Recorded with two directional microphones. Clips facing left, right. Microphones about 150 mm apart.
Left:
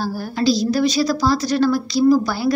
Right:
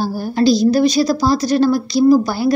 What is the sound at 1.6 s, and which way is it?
Speech, 15° right (ahead or behind).